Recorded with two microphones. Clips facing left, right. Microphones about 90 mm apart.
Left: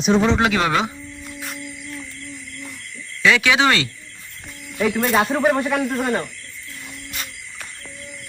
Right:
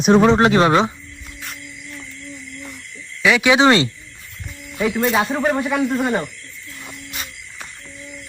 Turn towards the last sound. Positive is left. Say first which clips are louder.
# even
turn(degrees=-5)  # may be behind; listen again after turning